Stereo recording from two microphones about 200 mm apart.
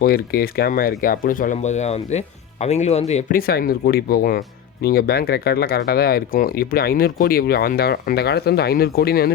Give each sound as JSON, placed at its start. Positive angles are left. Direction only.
{"t": 0.0, "sound": "speech", "side_deg": 50}
{"t": 3.3, "sound": "speech", "side_deg": 45}